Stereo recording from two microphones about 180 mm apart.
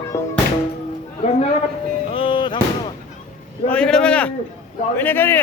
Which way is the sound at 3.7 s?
5° left (ahead or behind).